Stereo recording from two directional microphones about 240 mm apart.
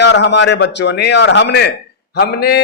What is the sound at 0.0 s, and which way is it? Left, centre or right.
Speech, left.